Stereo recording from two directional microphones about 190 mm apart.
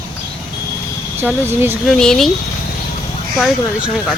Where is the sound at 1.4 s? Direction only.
10° right (ahead or behind).